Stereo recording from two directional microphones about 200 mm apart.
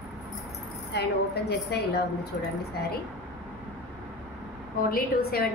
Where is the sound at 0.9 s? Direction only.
55° left (ahead or behind).